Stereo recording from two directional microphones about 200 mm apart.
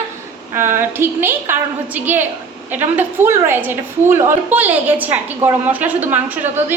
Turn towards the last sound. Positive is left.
turn(degrees=-10)  # may be behind; listen again after turning